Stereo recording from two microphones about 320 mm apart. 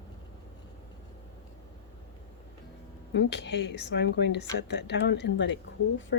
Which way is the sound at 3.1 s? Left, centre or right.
Left.